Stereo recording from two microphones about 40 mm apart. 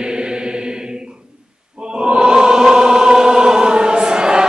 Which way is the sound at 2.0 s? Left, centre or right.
Right.